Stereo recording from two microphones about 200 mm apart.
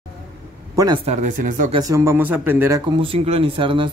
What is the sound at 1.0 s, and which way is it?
Speech, 35° right (ahead or behind).